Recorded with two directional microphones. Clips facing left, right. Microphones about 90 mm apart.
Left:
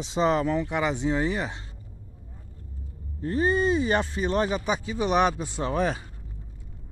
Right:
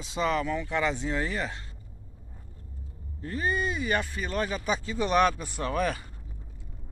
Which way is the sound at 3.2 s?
30° left (ahead or behind).